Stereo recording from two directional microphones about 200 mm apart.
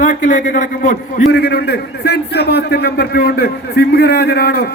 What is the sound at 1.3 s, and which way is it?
A man's voice, 55° left (ahead or behind).